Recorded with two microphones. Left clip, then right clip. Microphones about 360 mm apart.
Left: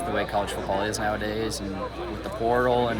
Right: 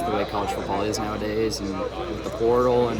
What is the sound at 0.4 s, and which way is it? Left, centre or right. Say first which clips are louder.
Speech: right 2 dB; left.